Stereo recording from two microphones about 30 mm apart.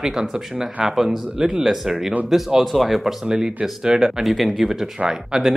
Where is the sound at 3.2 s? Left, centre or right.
Centre.